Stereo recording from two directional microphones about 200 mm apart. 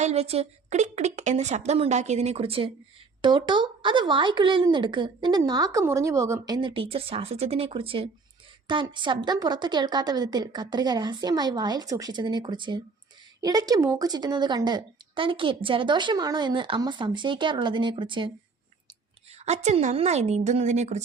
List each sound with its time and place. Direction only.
0.0 s a woman's voice: 30° right (ahead or behind)
19.5 s a woman's voice: 35° right (ahead or behind)